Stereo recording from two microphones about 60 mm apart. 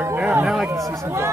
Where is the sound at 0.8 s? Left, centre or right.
Right.